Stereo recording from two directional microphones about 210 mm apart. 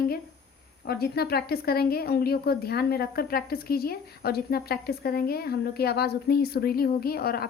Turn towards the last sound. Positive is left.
turn(degrees=45)  # may be behind; listen again after turning